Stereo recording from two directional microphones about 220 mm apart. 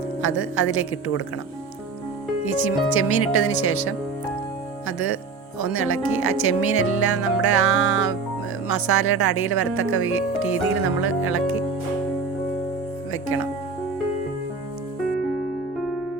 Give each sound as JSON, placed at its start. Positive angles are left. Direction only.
{"t": 0.2, "sound": "speech", "side_deg": 75}
{"t": 2.4, "sound": "speech", "side_deg": 80}
{"t": 13.2, "sound": "speech", "side_deg": 75}